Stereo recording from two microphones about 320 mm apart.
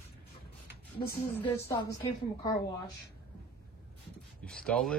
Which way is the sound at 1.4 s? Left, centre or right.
Centre.